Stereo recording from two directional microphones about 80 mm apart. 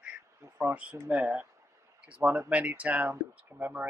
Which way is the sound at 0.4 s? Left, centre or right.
Right.